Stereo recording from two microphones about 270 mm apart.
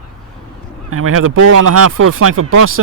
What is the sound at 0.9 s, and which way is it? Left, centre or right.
Speech, right.